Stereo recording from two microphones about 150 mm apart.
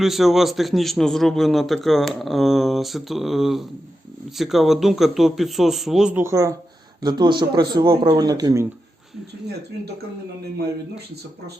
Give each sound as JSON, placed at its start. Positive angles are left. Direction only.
{"t": 0.0, "sound": "a man's voice", "side_deg": 0}
{"t": 6.2, "sound": "speech", "side_deg": -20}